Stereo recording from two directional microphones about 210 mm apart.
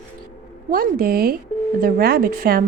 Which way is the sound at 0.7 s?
45° right (ahead or behind).